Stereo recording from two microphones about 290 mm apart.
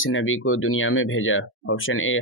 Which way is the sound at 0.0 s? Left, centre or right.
Left.